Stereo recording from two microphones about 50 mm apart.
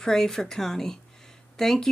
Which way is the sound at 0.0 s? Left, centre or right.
Centre.